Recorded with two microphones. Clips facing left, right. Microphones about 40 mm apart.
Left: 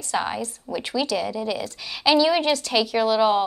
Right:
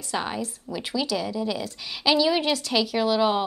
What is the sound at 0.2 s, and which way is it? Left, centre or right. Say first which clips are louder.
A woman's voice: left 3 dB; centre.